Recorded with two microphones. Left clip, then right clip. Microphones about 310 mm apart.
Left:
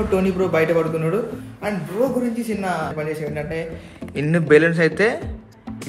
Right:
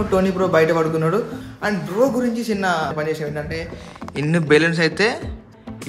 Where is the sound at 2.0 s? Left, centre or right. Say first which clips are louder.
Right 3 dB; centre.